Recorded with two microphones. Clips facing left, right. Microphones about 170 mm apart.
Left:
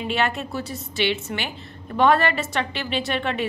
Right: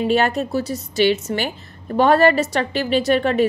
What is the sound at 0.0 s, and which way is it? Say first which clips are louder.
A woman's voice: right 7 dB; 40° right (ahead or behind).